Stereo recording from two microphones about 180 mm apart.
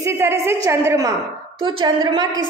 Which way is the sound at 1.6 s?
30° right (ahead or behind).